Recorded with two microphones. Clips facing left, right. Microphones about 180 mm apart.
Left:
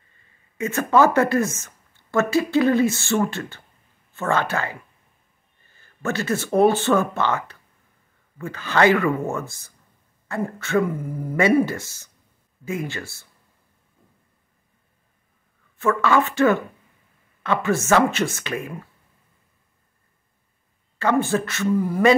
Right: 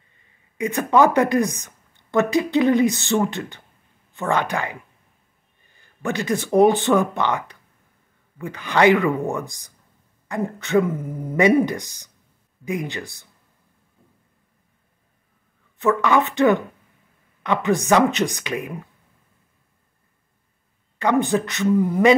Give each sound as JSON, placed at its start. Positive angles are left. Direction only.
{"t": 0.6, "sound": "speech", "side_deg": -15}
{"t": 15.8, "sound": "speech", "side_deg": -20}
{"t": 21.0, "sound": "speech", "side_deg": -15}